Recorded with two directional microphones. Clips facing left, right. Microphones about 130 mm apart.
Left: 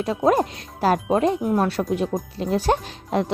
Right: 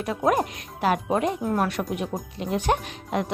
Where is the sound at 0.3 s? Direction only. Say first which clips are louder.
Left 3 dB; 30° left (ahead or behind).